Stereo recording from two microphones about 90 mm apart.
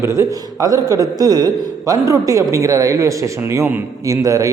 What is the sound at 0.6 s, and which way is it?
A man's voice, 45° right (ahead or behind).